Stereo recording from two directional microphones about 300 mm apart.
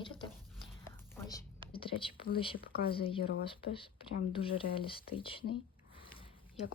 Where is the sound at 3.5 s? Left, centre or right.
Centre.